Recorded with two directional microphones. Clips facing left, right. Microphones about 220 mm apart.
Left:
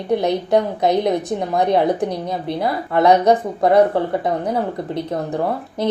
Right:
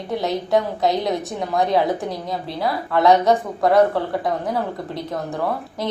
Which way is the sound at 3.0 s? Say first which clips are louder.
Left 2 dB; 20° left (ahead or behind).